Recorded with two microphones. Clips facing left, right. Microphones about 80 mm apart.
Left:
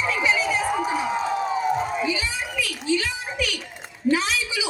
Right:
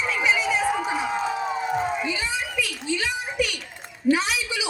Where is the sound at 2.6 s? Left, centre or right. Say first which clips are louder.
Left 4 dB; left.